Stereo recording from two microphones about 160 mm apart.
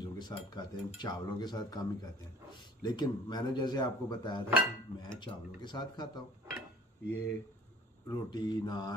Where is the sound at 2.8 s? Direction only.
25° left (ahead or behind).